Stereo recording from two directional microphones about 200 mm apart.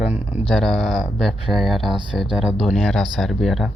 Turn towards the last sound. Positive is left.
turn(degrees=0)  # may be behind; listen again after turning